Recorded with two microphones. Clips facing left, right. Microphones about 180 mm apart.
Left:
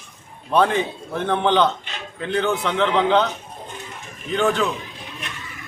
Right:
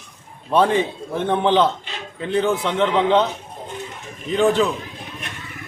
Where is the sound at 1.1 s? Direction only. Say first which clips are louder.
Right 1 dB; centre (ahead or behind).